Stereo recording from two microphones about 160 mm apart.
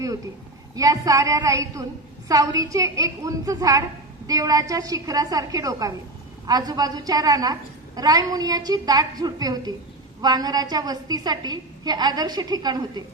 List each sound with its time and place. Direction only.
0.8 s a woman's voice: 20° right (ahead or behind)